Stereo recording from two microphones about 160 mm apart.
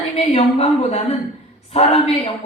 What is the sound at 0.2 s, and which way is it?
A woman's voice, 45° left (ahead or behind).